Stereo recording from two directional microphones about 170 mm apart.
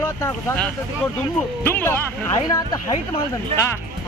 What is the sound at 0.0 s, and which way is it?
Speech, 15° left (ahead or behind).